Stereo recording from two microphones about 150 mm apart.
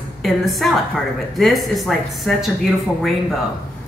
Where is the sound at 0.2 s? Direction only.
Centre (ahead or behind).